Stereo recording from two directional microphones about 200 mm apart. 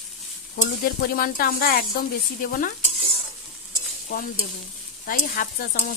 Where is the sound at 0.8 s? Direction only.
45° left (ahead or behind).